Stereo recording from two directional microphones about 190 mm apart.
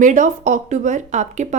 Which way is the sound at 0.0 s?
40° right (ahead or behind).